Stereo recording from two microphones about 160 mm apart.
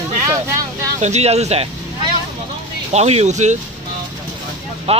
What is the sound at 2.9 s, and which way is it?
Speech, 40° right (ahead or behind).